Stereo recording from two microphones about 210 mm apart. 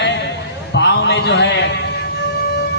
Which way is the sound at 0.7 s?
55° left (ahead or behind).